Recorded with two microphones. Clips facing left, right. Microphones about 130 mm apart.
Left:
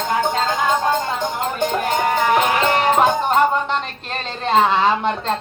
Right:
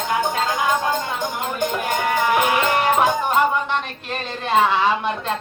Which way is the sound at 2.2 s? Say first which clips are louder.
Left 1 dB; 35° left (ahead or behind).